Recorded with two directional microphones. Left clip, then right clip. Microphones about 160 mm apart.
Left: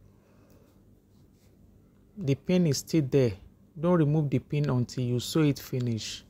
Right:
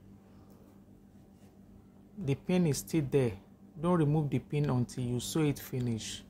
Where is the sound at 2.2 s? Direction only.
35° left (ahead or behind).